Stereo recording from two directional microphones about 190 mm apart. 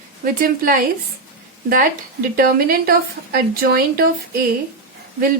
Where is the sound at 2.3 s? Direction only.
50° right (ahead or behind).